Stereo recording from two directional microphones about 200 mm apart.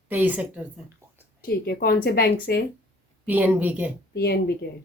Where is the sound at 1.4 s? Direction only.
50° left (ahead or behind).